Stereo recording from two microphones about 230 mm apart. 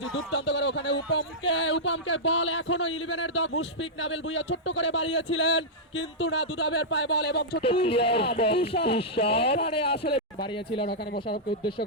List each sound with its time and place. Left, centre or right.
0.1 s speech: left
7.6 s speech: left
10.8 s speech: left